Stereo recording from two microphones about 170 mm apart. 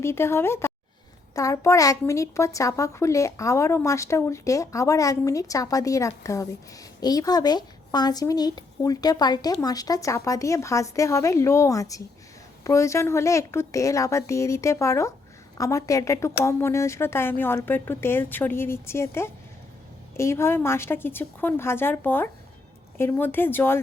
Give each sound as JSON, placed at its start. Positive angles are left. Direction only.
{"t": 0.0, "sound": "a woman's voice", "side_deg": 15}